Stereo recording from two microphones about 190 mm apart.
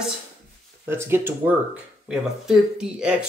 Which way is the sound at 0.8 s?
10° right (ahead or behind).